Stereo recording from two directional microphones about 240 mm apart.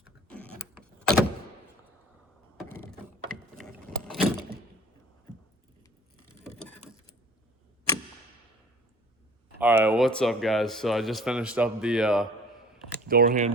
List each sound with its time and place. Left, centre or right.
0.0 s power windows: centre
2.9 s vehicle: centre
9.6 s speech: centre
13.1 s speech: right